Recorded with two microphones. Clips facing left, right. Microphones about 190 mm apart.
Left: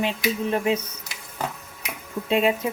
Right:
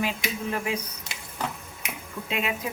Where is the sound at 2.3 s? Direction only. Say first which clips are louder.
Left 9 dB; 30° left (ahead or behind).